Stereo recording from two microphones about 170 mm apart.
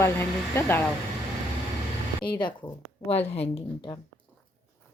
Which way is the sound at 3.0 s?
35° left (ahead or behind).